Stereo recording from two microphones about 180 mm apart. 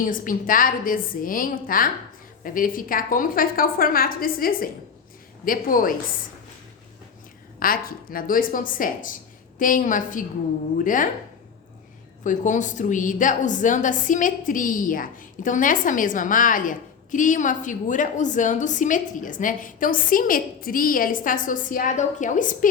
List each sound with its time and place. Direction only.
0.0 s a woman's voice: 50° left (ahead or behind)
7.6 s a woman's voice: 55° left (ahead or behind)
12.2 s a woman's voice: 45° left (ahead or behind)